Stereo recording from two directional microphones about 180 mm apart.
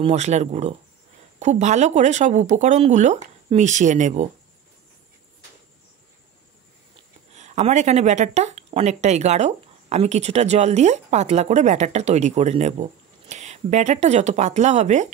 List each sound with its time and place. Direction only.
0.0 s speech: 40° right (ahead or behind)
7.0 s speech: 40° right (ahead or behind)